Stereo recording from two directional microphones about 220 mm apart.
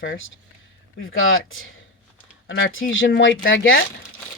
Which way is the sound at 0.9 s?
65° left (ahead or behind).